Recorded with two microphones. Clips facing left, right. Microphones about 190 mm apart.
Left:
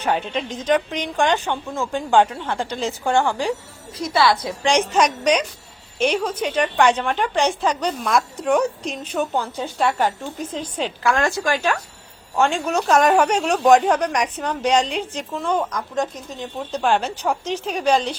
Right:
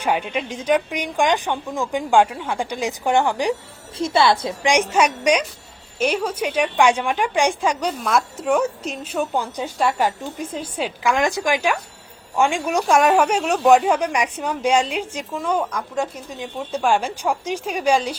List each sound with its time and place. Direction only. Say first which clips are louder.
0.0 s a woman's voice: even; 10° right (ahead or behind)
4.9 s a woman's voice: even; 10° right (ahead or behind)